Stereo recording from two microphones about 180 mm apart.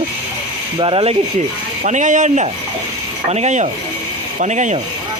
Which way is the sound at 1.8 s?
40° right (ahead or behind).